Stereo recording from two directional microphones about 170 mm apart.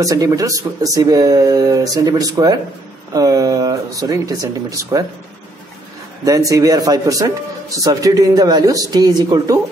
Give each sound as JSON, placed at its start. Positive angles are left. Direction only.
{"t": 0.0, "sound": "a man's voice", "side_deg": -20}
{"t": 6.2, "sound": "a man's voice", "side_deg": -20}